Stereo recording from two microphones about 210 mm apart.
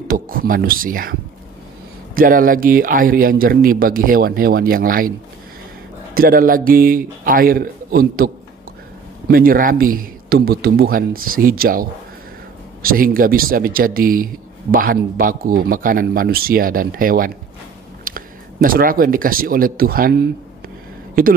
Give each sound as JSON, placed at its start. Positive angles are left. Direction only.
{"t": 0.1, "sound": "speech", "side_deg": -40}
{"t": 2.1, "sound": "speech", "side_deg": -40}
{"t": 6.1, "sound": "speech", "side_deg": -45}
{"t": 9.3, "sound": "speech", "side_deg": -45}